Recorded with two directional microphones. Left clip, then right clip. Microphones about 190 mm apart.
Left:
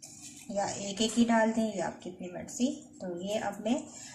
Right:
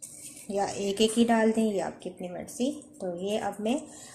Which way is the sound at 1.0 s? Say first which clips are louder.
Right 3 dB; 40° right (ahead or behind).